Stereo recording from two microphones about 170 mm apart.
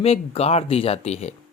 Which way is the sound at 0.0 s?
35° left (ahead or behind).